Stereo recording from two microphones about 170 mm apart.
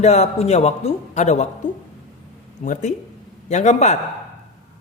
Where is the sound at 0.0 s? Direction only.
40° left (ahead or behind).